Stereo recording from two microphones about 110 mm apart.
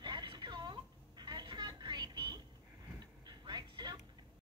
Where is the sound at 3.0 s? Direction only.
40° right (ahead or behind).